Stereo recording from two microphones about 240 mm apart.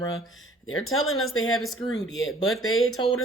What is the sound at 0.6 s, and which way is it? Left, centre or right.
Speech, left.